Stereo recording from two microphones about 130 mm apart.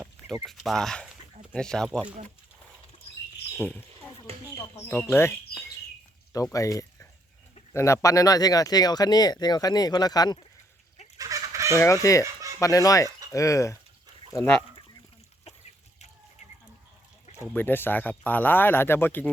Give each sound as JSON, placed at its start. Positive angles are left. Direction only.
{"t": 0.4, "sound": "speech", "side_deg": 0}
{"t": 3.6, "sound": "speech", "side_deg": 10}
{"t": 4.3, "sound": "a sound", "side_deg": -50}
{"t": 4.7, "sound": "speech", "side_deg": 20}
{"t": 11.2, "sound": "fowl", "side_deg": -25}
{"t": 11.7, "sound": "speech", "side_deg": 25}
{"t": 17.5, "sound": "speech", "side_deg": 15}